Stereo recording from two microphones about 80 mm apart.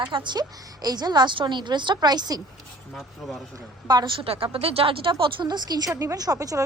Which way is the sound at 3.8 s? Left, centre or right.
Right.